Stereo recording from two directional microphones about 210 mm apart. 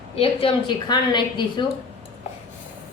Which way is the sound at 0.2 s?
25° left (ahead or behind).